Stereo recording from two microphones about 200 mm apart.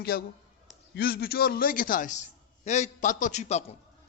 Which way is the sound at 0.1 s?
50° left (ahead or behind).